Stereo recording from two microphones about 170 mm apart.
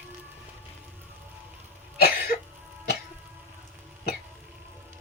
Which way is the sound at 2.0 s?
55° left (ahead or behind).